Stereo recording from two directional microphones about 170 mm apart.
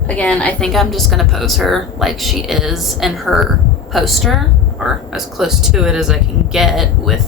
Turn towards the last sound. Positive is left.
turn(degrees=0)  # may be behind; listen again after turning